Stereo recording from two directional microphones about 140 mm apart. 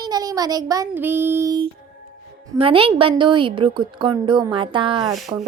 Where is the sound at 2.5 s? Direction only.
40° right (ahead or behind).